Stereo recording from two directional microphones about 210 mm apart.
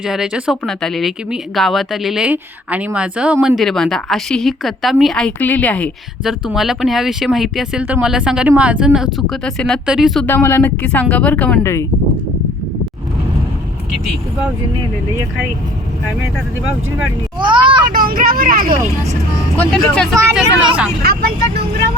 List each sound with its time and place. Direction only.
0.0 s speech: 5° right (ahead or behind)
10.2 s a woman's voice: 10° left (ahead or behind)
17.4 s children playing: 25° right (ahead or behind)
17.8 s speech: 45° right (ahead or behind)
19.5 s speech: 5° left (ahead or behind)